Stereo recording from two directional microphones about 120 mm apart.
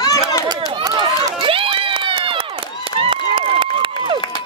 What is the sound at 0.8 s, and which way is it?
Run, 40° right (ahead or behind).